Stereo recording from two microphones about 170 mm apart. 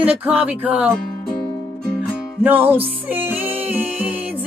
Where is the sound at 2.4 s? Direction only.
10° right (ahead or behind).